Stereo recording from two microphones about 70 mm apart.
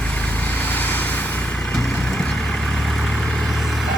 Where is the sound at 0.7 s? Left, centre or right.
Left.